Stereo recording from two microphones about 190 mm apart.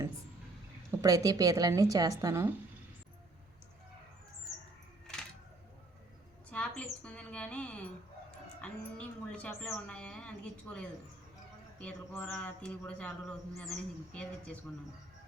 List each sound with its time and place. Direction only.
0.9 s a woman's voice: 15° right (ahead or behind)
6.5 s a sound: 5° left (ahead or behind)
7.0 s mouse: 5° left (ahead or behind)
8.6 s a man's voice: 5° left (ahead or behind)